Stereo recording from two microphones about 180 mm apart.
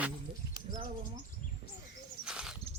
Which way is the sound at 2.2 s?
5° right (ahead or behind).